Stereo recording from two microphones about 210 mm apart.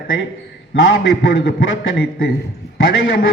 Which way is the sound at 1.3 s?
50° left (ahead or behind).